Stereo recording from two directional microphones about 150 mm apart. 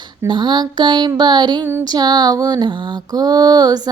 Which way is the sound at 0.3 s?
30° right (ahead or behind).